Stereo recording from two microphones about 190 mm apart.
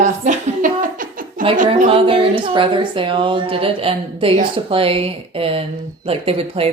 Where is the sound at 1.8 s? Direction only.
30° right (ahead or behind).